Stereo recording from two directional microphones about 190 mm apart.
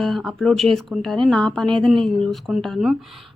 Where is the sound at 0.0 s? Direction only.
Centre (ahead or behind).